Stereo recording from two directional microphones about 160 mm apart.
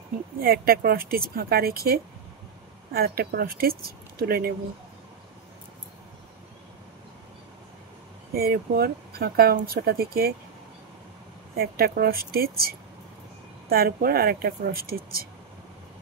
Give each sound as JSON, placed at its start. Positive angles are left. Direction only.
{"t": 0.4, "sound": "speech", "side_deg": -65}
{"t": 8.3, "sound": "speech", "side_deg": -75}
{"t": 11.5, "sound": "speech", "side_deg": -70}